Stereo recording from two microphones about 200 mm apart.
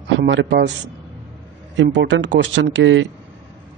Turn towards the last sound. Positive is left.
turn(degrees=-65)  # may be behind; listen again after turning